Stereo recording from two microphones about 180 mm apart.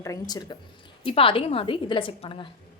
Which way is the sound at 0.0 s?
20° left (ahead or behind).